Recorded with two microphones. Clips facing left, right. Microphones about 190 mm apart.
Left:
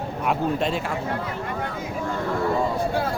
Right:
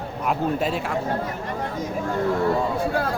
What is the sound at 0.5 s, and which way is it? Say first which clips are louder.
Speech: even; 5° right (ahead or behind).